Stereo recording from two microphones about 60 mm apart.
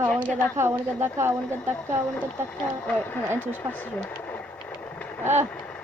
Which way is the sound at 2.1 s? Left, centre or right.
Left.